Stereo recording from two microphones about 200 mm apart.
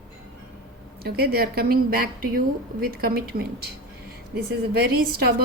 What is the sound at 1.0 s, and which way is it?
A woman's voice, 50° right (ahead or behind).